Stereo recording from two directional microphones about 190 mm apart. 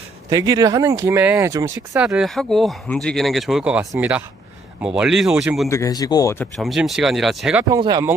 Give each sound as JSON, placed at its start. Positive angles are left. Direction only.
{"t": 0.3, "sound": "speech", "side_deg": -20}
{"t": 2.1, "sound": "speech", "side_deg": 0}
{"t": 5.6, "sound": "speech", "side_deg": 15}
{"t": 6.4, "sound": "speech", "side_deg": 0}
{"t": 7.7, "sound": "speech", "side_deg": -20}